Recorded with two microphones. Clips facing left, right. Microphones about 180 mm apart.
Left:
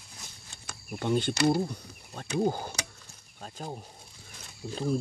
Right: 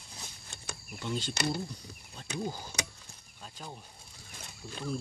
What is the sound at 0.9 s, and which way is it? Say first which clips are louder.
Speech: left 8 dB; 55° left (ahead or behind).